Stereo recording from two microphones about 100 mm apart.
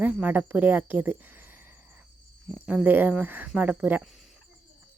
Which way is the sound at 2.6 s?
20° right (ahead or behind).